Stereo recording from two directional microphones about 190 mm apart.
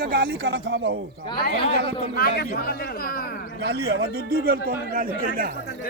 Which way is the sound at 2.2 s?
55° left (ahead or behind).